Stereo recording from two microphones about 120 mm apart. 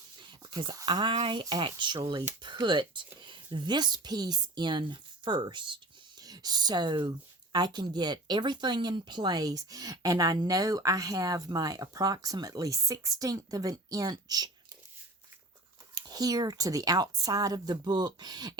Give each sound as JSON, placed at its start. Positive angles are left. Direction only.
{"t": 0.2, "sound": "a sound", "side_deg": -40}
{"t": 1.2, "sound": "speech", "side_deg": -40}
{"t": 16.0, "sound": "speech", "side_deg": -30}